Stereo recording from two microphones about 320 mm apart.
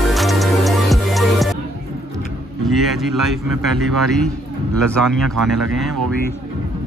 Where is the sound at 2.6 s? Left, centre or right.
Centre.